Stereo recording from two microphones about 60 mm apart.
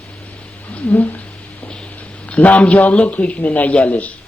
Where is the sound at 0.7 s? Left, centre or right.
Left.